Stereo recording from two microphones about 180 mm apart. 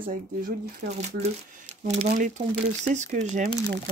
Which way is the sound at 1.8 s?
40° right (ahead or behind).